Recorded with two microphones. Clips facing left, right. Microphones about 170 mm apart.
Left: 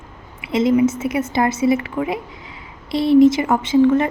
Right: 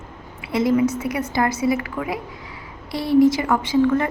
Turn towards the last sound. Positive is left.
turn(degrees=25)  # may be behind; listen again after turning